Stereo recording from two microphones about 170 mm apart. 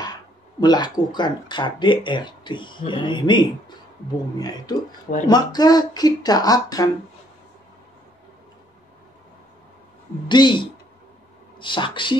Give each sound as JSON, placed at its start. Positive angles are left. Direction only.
{"t": 0.6, "sound": "speech", "side_deg": 25}
{"t": 10.2, "sound": "speech", "side_deg": 25}